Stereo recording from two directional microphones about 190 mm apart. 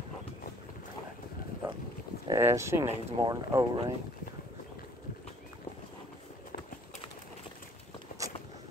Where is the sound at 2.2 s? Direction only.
15° right (ahead or behind).